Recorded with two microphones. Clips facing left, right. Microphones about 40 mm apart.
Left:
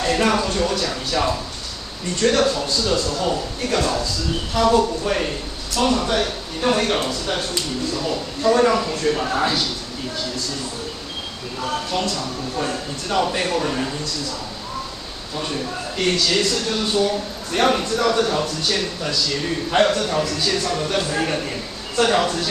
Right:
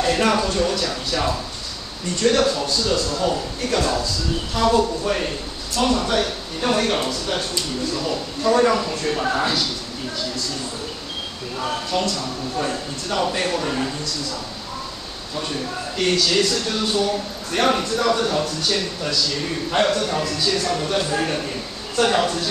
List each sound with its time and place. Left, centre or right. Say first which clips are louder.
0.0 s a sound: even; centre
2.2 s a man's voice: even; centre
12.5 s a man's voice: even; centre
16.1 s a man's voice: even; centre
19.8 s a man's voice: left 2 dB; centre